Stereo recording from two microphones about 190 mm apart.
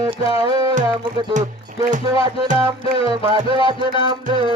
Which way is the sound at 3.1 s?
20° right (ahead or behind).